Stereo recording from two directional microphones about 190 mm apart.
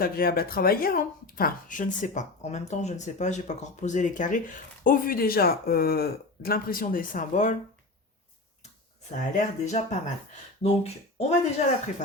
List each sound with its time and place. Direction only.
0.0 s speech: 50° left (ahead or behind)
9.1 s speech: 40° left (ahead or behind)